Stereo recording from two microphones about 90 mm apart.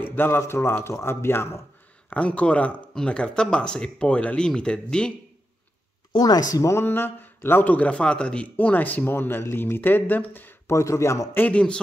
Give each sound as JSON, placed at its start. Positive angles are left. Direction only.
{"t": 0.0, "sound": "speech", "side_deg": 20}
{"t": 2.0, "sound": "speech", "side_deg": 15}
{"t": 6.1, "sound": "speech", "side_deg": 45}
{"t": 10.7, "sound": "speech", "side_deg": 35}
{"t": 11.3, "sound": "speech", "side_deg": 15}